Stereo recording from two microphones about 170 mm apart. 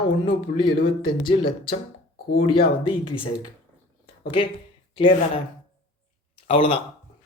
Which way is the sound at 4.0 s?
30° left (ahead or behind).